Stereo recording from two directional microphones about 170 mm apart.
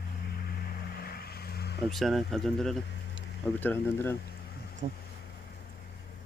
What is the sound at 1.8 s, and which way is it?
Speech, centre (ahead or behind).